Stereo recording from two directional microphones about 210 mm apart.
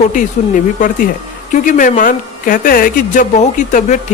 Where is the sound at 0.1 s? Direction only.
40° left (ahead or behind).